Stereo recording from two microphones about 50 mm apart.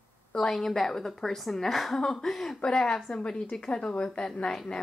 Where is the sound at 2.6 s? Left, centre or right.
Centre.